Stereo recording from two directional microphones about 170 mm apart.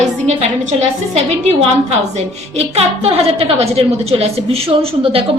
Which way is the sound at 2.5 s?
35° right (ahead or behind).